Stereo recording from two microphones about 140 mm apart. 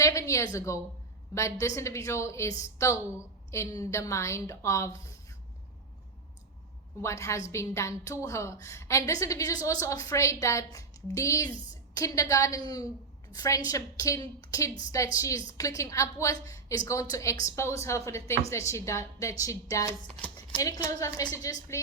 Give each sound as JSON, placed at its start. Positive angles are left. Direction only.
{"t": 0.0, "sound": "a woman's voice", "side_deg": 20}
{"t": 7.0, "sound": "a woman's voice", "side_deg": 20}